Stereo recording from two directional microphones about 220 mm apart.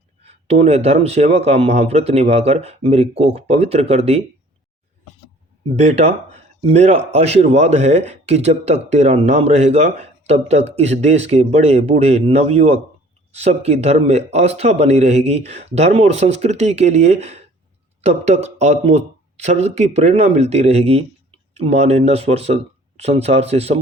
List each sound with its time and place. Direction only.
0.3 s speech: 30° right (ahead or behind)
5.7 s speech: 30° right (ahead or behind)